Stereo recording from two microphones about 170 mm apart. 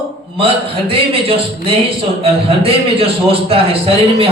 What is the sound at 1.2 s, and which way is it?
A man's voice, 35° right (ahead or behind).